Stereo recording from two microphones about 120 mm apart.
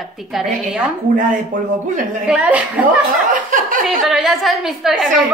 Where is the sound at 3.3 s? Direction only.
90° right.